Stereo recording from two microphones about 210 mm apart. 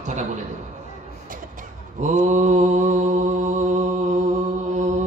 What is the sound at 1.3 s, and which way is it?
Mantra, 40° right (ahead or behind).